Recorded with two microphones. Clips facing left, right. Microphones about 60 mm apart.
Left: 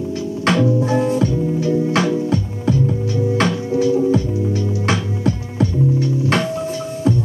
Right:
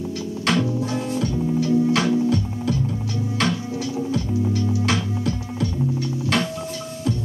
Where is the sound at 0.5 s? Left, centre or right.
Left.